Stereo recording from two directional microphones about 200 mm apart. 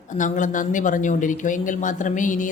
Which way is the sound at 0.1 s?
40° left (ahead or behind).